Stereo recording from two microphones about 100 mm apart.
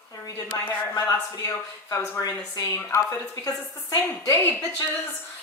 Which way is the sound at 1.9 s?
30° left (ahead or behind).